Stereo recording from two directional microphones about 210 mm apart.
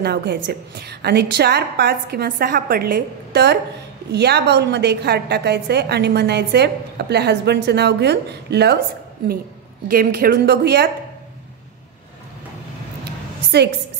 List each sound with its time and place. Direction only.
0.0 s a woman's voice: 50° right (ahead or behind)
9.8 s a woman's voice: 45° right (ahead or behind)
13.5 s a woman's voice: 55° right (ahead or behind)